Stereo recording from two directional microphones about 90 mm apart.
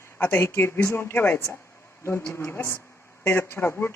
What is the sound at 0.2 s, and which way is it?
Speech, 25° left (ahead or behind).